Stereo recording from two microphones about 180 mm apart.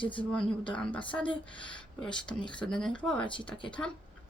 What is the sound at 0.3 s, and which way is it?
Speech, 5° left (ahead or behind).